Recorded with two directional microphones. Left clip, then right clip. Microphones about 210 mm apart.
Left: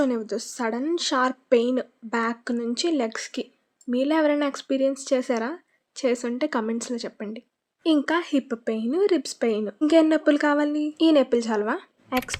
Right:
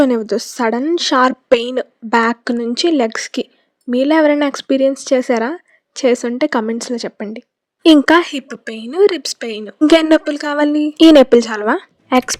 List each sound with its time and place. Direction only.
0.0 s speech: 40° right (ahead or behind)
7.8 s a woman's voice: 45° right (ahead or behind)